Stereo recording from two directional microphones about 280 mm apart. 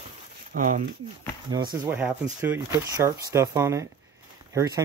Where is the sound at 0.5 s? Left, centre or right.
Right.